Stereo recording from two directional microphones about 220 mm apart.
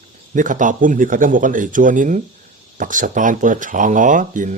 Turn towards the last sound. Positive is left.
turn(degrees=-35)  # may be behind; listen again after turning